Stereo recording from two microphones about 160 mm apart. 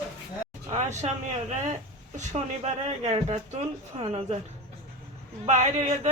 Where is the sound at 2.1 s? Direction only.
45° right (ahead or behind).